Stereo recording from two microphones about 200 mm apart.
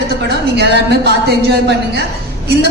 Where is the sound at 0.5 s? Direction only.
55° right (ahead or behind).